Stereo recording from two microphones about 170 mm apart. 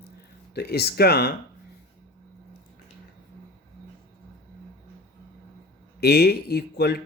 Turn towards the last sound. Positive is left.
turn(degrees=70)  # may be behind; listen again after turning